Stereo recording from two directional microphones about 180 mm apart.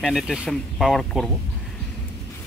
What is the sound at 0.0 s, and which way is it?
Speech, centre (ahead or behind).